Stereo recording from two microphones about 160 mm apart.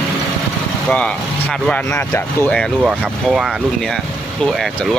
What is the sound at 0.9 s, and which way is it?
Speech, 5° left (ahead or behind).